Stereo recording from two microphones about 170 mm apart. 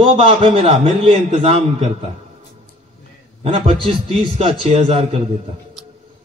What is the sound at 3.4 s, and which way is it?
A man's voice, 35° right (ahead or behind).